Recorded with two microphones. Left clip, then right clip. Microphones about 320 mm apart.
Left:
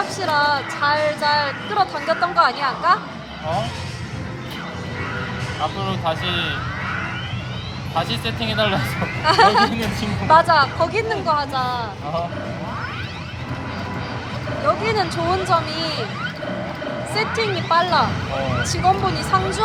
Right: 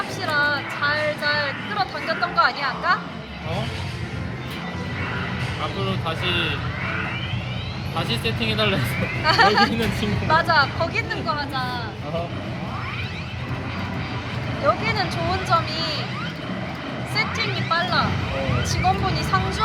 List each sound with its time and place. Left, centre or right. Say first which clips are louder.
0.2 s speech: left 3 dB; centre
6.1 s speech: left 2 dB; left
7.9 s speech: left 2 dB; left
9.2 s speech: left 3 dB; centre
14.8 s speech: left 4 dB; centre
17.2 s speech: left 2 dB; centre